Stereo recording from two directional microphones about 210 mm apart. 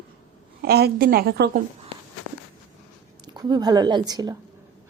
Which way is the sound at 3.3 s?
20° right (ahead or behind).